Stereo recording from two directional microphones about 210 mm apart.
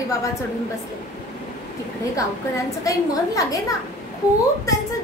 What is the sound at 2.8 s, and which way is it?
Speech, 15° left (ahead or behind).